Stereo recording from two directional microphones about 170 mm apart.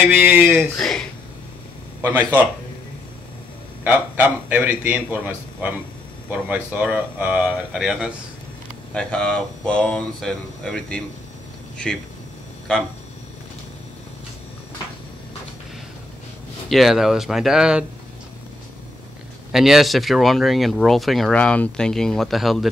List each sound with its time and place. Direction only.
0.0 s a man's voice: 10° right (ahead or behind)
0.7 s speech: 5° left (ahead or behind)
2.0 s speech: 10° right (ahead or behind)
3.8 s a man's voice: 10° right (ahead or behind)
16.6 s speech: centre (ahead or behind)
19.5 s speech: centre (ahead or behind)